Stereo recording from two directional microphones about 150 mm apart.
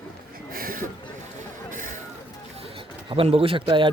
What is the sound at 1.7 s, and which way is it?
Vehicle, 60° right (ahead or behind).